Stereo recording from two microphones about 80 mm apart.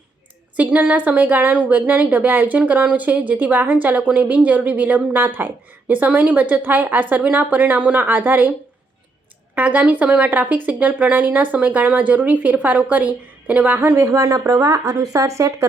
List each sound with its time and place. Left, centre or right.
0.5 s a woman's voice: centre
9.6 s a woman's voice: centre
14.0 s speech: right